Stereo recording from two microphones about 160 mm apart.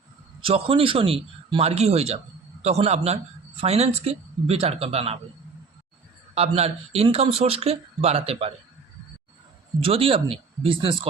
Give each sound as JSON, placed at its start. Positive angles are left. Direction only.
{"t": 0.4, "sound": "a man's voice", "side_deg": -35}
{"t": 6.3, "sound": "a man's voice", "side_deg": -40}
{"t": 9.8, "sound": "a man's voice", "side_deg": -35}